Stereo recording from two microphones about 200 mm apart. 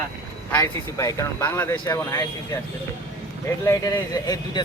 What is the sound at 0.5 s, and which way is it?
Speech, 15° left (ahead or behind).